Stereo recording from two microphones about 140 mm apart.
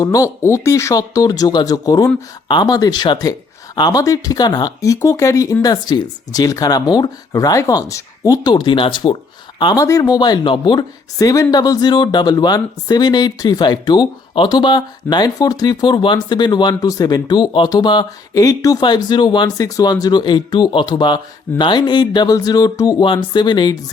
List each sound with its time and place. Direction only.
0.0 s speech: 25° left (ahead or behind)
9.7 s speech: 20° left (ahead or behind)